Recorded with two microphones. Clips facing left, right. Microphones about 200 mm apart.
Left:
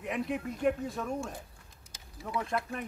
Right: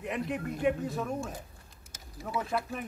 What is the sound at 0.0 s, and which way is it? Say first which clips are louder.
Speech: even; centre (ahead or behind).